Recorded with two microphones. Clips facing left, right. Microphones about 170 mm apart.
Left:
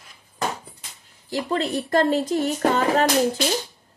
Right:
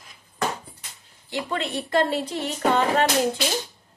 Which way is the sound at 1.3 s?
40° left (ahead or behind).